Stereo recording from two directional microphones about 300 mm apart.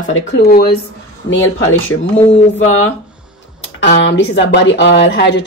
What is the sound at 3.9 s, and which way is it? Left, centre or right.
Speech, left.